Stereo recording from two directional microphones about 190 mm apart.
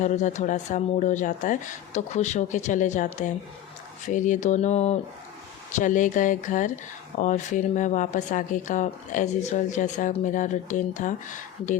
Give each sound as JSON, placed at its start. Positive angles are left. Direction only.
{"t": 0.0, "sound": "speech", "side_deg": 40}